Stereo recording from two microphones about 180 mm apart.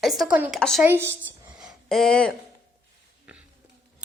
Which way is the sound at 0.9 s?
10° right (ahead or behind).